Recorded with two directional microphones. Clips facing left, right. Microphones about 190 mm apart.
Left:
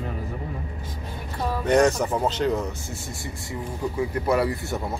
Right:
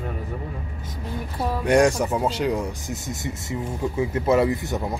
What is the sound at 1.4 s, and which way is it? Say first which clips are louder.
Speech: right 1 dB; 10° right (ahead or behind).